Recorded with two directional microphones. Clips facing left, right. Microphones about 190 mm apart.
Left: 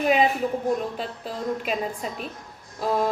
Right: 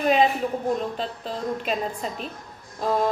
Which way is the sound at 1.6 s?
5° left (ahead or behind).